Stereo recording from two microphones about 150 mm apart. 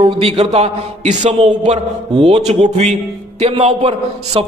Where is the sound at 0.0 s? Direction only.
40° right (ahead or behind).